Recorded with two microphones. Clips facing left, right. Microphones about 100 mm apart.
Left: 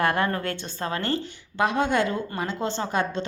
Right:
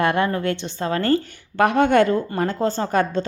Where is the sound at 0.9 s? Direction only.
45° right (ahead or behind).